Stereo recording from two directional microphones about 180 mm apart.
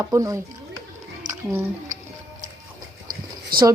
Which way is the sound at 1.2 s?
45° right (ahead or behind).